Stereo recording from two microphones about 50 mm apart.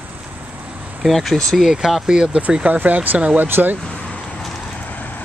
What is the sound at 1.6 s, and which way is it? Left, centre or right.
Speech, centre.